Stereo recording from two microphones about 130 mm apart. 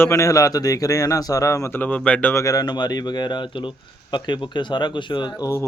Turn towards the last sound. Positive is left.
turn(degrees=25)  # may be behind; listen again after turning